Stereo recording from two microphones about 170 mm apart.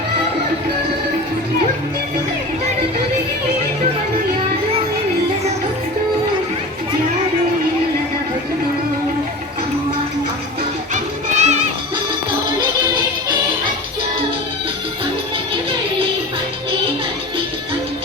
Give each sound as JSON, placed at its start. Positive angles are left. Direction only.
{"t": 10.9, "sound": "music", "side_deg": -40}